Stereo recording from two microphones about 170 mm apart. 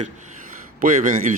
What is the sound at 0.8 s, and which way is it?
Speech, 50° right (ahead or behind).